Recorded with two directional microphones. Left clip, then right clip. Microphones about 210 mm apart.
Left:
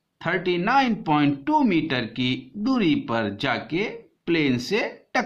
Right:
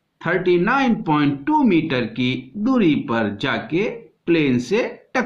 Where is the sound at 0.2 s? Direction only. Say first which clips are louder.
Right 6 dB; 35° left (ahead or behind).